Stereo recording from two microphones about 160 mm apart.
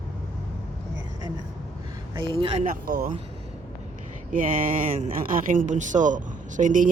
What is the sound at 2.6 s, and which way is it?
Speech, 60° right (ahead or behind).